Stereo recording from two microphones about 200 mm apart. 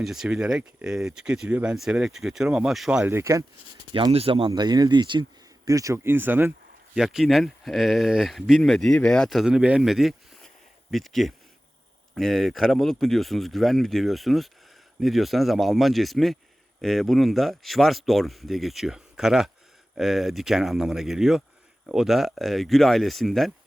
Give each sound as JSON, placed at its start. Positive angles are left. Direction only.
{"t": 0.0, "sound": "speech", "side_deg": 0}
{"t": 3.9, "sound": "speech", "side_deg": -30}